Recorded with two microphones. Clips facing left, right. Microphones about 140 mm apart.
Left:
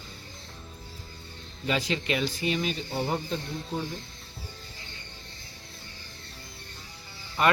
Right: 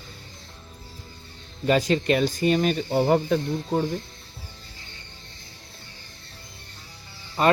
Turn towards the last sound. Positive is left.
turn(degrees=-30)  # may be behind; listen again after turning